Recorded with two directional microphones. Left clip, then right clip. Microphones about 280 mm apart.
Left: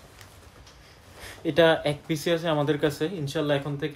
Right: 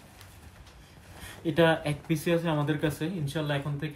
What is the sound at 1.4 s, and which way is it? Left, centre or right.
Speech, left.